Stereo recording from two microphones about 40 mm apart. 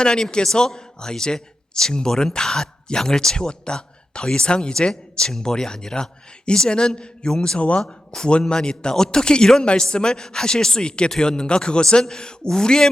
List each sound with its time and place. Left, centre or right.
0.0 s a man's voice: centre
7.6 s a man's voice: left